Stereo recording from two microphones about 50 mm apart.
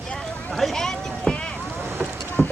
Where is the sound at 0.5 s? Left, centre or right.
Centre.